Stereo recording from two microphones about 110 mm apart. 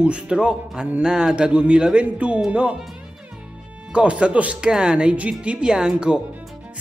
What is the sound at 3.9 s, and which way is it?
Speech, 10° right (ahead or behind).